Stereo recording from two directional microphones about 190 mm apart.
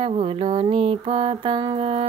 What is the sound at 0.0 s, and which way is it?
Mantra, 30° right (ahead or behind).